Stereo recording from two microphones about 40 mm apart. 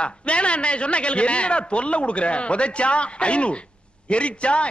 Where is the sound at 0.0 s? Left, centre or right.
Left.